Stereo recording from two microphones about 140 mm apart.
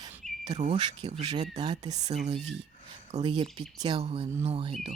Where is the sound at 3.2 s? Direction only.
35° right (ahead or behind).